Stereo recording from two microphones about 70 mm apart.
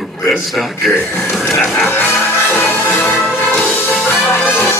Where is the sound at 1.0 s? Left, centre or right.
Left.